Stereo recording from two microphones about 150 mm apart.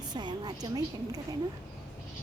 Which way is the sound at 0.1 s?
30° right (ahead or behind).